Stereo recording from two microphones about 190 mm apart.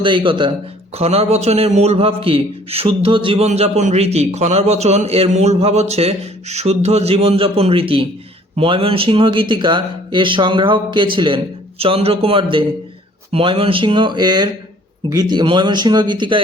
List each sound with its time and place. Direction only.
0.0 s a man's voice: 25° right (ahead or behind)